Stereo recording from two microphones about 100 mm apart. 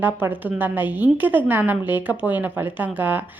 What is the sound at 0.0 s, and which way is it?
A woman's voice, 20° right (ahead or behind).